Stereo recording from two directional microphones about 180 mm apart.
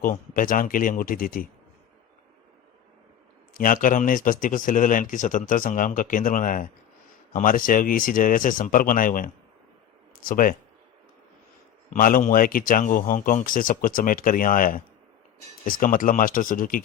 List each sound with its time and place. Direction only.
0.0 s speech: 50° left (ahead or behind)
3.5 s speech: 50° left (ahead or behind)
11.9 s speech: 50° left (ahead or behind)